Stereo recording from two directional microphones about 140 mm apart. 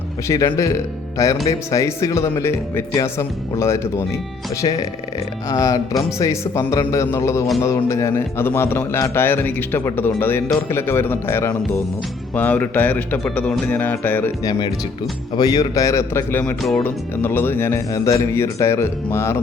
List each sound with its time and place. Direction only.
0.3 s speech: 20° left (ahead or behind)
4.6 s a man's voice: 35° left (ahead or behind); by 14.3 s 15° left (ahead or behind)
15.4 s speech: 30° left (ahead or behind)